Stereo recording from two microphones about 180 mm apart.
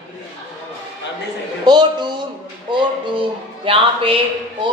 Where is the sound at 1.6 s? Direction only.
25° right (ahead or behind).